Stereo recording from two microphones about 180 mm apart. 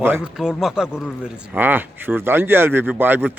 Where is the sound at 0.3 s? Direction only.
Centre (ahead or behind).